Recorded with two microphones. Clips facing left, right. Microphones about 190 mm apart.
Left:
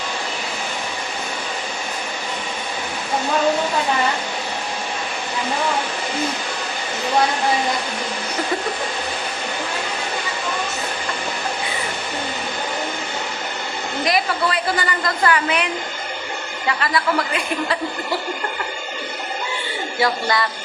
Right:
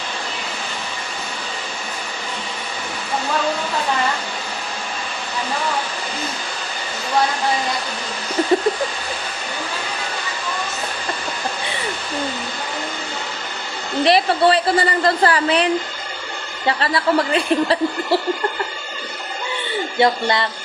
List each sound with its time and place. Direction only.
14.0 s a woman's voice: 30° right (ahead or behind)
20.0 s speech: 25° right (ahead or behind)